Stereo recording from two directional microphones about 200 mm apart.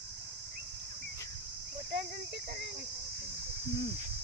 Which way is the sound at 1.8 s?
55° right (ahead or behind).